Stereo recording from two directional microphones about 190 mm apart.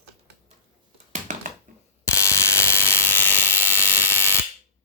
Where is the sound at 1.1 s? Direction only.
40° right (ahead or behind).